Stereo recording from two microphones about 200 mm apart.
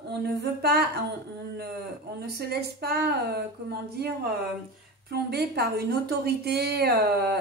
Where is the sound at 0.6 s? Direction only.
55° right (ahead or behind).